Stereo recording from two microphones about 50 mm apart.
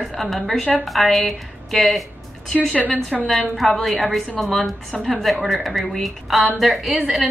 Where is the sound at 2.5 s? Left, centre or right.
Left.